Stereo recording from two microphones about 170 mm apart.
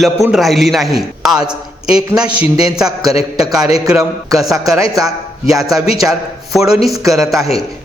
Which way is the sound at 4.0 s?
20° right (ahead or behind).